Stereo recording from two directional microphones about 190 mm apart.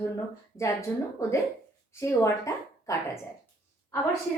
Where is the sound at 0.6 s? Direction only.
15° left (ahead or behind).